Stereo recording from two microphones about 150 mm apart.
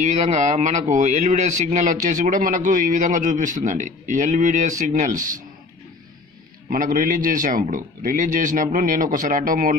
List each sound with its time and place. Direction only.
0.0 s speech: 50° right (ahead or behind)
6.7 s speech: 70° right (ahead or behind)